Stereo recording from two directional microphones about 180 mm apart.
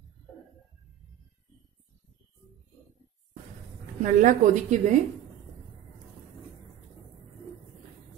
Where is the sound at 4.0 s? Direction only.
45° right (ahead or behind).